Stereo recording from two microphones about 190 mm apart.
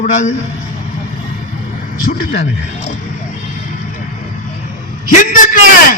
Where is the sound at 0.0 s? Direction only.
40° left (ahead or behind).